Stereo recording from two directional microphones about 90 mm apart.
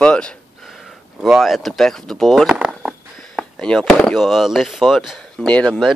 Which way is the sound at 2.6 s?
10° right (ahead or behind).